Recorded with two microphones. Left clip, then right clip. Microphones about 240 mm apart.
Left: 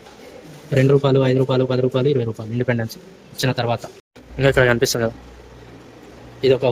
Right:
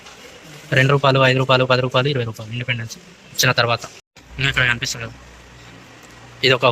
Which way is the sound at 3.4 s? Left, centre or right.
Centre.